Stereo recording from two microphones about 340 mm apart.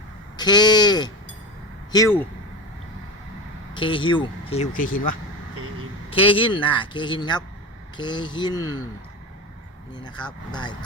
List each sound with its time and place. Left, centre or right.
0.3 s speech: centre
3.8 s speech: centre
10.0 s speech: centre